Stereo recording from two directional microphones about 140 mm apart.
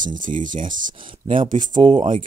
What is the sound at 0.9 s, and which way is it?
Speech, 40° right (ahead or behind).